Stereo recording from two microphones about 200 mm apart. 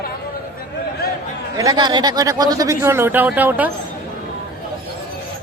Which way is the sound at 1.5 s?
20° right (ahead or behind).